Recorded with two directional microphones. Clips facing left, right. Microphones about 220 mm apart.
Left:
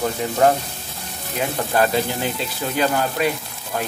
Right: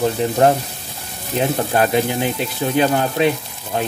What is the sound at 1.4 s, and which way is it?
Speech, 20° right (ahead or behind).